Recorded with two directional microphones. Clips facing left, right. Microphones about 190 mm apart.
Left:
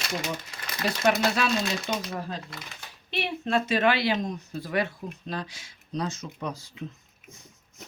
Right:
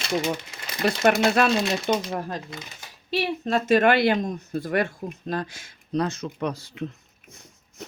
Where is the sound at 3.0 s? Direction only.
40° right (ahead or behind); by 6.9 s 70° right (ahead or behind).